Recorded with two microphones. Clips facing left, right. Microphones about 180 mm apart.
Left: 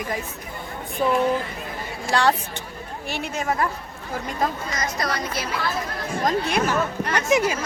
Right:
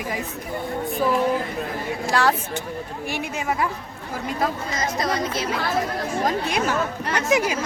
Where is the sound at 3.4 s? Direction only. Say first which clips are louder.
Left 1 dB; 10° right (ahead or behind).